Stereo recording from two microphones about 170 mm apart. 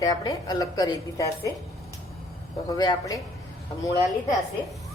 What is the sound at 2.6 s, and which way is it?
Speech, 20° left (ahead or behind).